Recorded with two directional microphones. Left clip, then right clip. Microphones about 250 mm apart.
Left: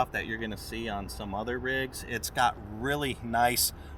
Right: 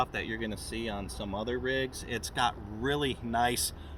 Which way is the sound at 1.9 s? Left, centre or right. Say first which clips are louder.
Left 3 dB; centre.